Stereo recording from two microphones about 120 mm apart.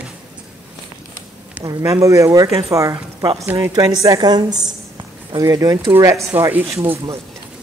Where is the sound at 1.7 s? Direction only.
25° right (ahead or behind).